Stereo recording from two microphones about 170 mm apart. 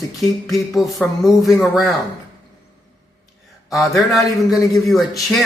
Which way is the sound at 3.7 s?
Centre (ahead or behind).